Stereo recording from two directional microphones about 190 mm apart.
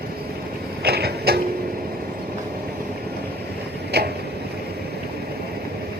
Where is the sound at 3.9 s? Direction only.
60° right (ahead or behind).